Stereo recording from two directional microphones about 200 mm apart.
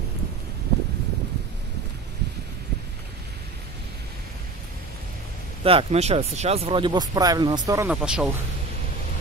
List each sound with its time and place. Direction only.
5.6 s speech: 30° right (ahead or behind)
7.9 s speech: 5° right (ahead or behind)